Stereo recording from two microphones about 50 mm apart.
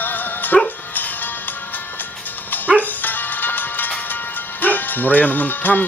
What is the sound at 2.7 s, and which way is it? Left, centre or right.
Music, left.